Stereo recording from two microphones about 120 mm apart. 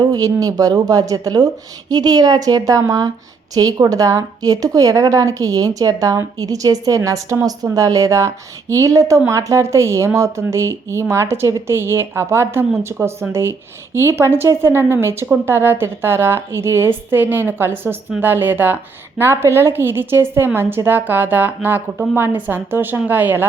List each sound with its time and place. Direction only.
0.0 s a woman's voice: 30° right (ahead or behind)